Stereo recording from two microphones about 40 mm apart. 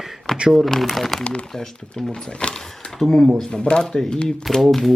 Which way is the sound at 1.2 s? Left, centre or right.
Left.